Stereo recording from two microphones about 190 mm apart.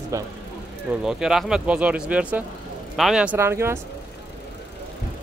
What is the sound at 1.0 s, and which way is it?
Speech, 5° right (ahead or behind).